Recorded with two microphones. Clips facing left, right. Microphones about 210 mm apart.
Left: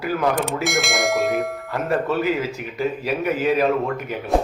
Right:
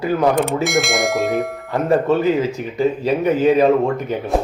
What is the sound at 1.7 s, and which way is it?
A man's voice, 25° right (ahead or behind).